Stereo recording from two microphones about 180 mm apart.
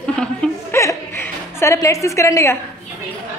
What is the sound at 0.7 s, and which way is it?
A woman's voice, 15° left (ahead or behind).